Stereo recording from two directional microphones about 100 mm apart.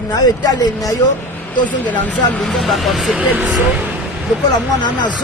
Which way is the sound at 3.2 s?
15° right (ahead or behind).